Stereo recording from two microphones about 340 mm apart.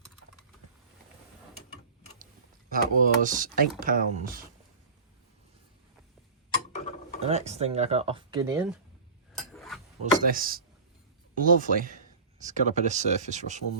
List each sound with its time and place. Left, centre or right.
2.7 s speech: right
7.2 s speech: centre
9.6 s a sound: centre
10.0 s speech: right